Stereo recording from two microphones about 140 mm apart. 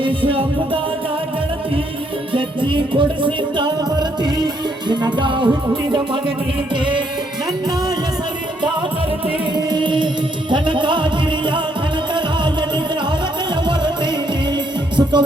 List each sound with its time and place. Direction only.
0.0 s music: 40° right (ahead or behind)
2.3 s music: 35° right (ahead or behind)
9.6 s music: 35° right (ahead or behind)